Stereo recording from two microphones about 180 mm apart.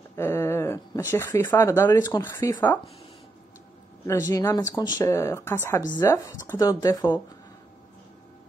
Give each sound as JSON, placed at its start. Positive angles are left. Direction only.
{"t": 0.1, "sound": "a sound", "side_deg": 15}
{"t": 1.1, "sound": "speech", "side_deg": 15}
{"t": 4.1, "sound": "speech", "side_deg": 20}